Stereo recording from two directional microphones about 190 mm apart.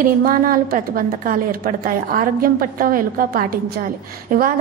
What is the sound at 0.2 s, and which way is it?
A woman's voice, 50° right (ahead or behind).